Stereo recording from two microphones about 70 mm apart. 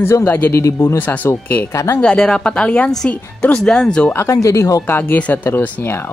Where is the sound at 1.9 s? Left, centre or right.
Centre.